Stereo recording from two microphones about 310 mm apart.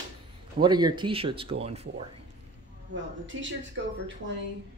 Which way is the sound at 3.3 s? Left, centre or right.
Right.